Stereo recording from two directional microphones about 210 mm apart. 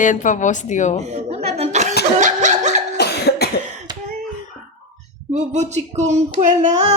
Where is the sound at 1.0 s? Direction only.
30° right (ahead or behind).